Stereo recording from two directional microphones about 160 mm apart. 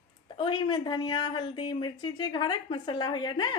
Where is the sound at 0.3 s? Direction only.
30° left (ahead or behind).